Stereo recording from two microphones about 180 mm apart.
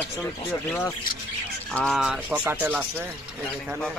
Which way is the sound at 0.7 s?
10° left (ahead or behind).